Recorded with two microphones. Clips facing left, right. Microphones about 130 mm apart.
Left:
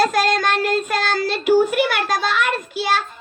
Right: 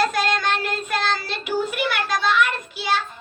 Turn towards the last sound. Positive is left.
turn(degrees=50)  # may be behind; listen again after turning